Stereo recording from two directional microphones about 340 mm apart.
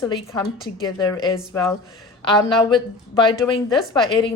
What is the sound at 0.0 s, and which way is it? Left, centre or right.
A woman's voice, centre.